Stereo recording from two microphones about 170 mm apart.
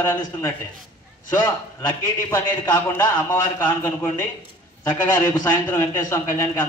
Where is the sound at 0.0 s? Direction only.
15° left (ahead or behind).